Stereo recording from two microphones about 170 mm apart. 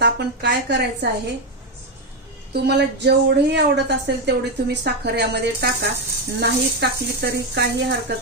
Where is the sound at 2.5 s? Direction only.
80° right.